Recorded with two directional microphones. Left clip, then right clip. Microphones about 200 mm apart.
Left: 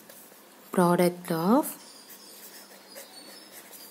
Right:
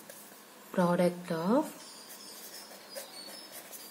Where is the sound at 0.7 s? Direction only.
55° left (ahead or behind).